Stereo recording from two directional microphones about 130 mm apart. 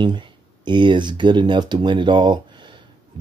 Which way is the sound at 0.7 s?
35° right (ahead or behind).